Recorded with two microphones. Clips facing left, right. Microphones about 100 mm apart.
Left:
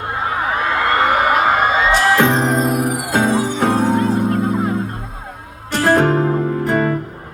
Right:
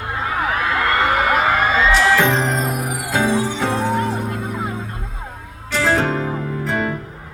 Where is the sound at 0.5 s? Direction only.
30° left (ahead or behind).